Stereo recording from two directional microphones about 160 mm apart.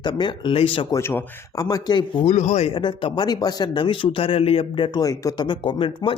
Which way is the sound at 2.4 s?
45° left (ahead or behind).